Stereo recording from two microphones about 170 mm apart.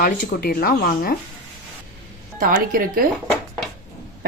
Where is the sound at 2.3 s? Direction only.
55° right (ahead or behind).